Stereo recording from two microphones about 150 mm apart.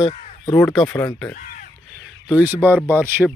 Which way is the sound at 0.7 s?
15° left (ahead or behind).